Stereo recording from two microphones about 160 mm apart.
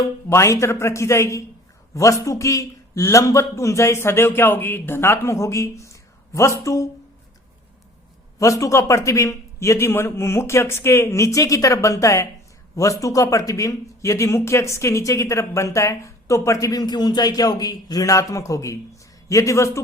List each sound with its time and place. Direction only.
0.0 s a man's voice: 20° left (ahead or behind)
8.4 s a man's voice: 20° left (ahead or behind)